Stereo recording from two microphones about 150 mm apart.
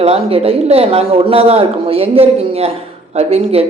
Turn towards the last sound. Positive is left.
turn(degrees=-45)  # may be behind; listen again after turning